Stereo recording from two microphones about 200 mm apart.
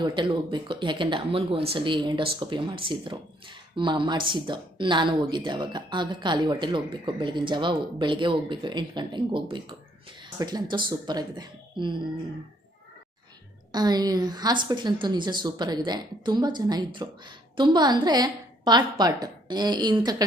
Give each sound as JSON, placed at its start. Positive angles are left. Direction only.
{"t": 0.0, "sound": "speech", "side_deg": -25}
{"t": 13.7, "sound": "speech", "side_deg": -20}